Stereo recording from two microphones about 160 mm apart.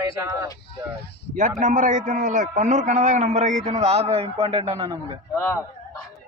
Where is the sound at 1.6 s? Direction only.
50° right (ahead or behind).